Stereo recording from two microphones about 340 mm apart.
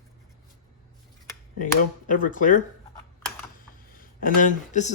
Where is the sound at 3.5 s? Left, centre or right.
Left.